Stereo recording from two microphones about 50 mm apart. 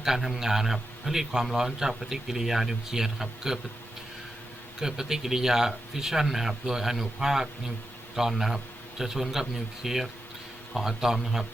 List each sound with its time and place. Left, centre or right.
0.0 s a man's voice: centre
4.8 s a man's voice: centre